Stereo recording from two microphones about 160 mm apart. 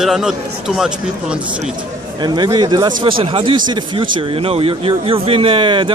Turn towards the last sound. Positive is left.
turn(degrees=-30)  # may be behind; listen again after turning